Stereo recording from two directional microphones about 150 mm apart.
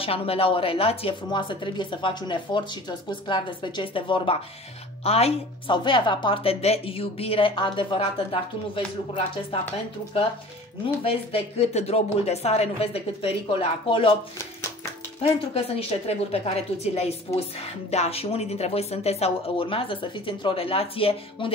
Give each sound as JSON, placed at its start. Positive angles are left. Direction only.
{"t": 0.0, "sound": "a woman's voice", "side_deg": 40}
{"t": 11.1, "sound": "a woman's voice", "side_deg": 40}
{"t": 15.2, "sound": "a woman's voice", "side_deg": 40}